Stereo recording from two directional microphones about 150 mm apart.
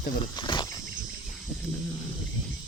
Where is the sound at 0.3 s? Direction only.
30° left (ahead or behind).